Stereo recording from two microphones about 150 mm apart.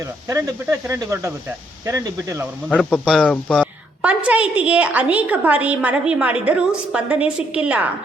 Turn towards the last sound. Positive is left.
turn(degrees=-10)  # may be behind; listen again after turning